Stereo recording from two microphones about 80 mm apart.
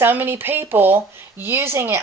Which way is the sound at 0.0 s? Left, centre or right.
Right.